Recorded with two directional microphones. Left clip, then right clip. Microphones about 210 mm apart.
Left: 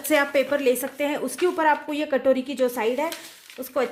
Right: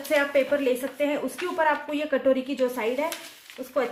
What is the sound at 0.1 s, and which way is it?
A woman's voice, 60° left (ahead or behind).